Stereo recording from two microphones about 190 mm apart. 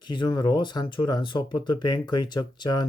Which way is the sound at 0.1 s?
25° left (ahead or behind).